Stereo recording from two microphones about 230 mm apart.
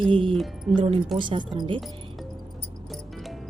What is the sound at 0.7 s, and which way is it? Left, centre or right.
A woman's voice, right.